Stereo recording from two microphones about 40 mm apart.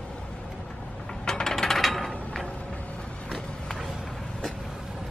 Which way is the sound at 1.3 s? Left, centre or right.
Centre.